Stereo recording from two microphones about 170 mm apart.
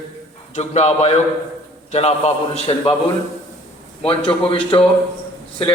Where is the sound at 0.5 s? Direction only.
40° left (ahead or behind).